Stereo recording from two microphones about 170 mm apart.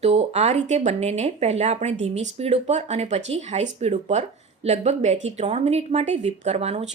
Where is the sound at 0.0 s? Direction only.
40° right (ahead or behind).